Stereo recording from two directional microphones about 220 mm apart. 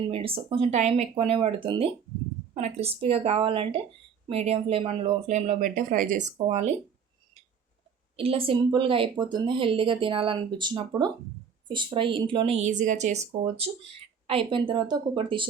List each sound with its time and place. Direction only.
0.1 s speech: 25° right (ahead or behind)
8.1 s speech: 25° right (ahead or behind)
14.3 s speech: 25° right (ahead or behind)